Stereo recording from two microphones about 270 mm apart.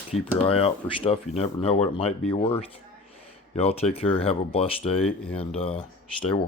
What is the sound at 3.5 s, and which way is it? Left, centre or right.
Speech, left.